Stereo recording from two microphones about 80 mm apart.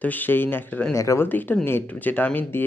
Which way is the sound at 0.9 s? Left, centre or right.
Left.